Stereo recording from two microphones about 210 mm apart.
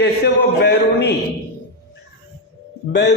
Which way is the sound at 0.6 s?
50° left (ahead or behind).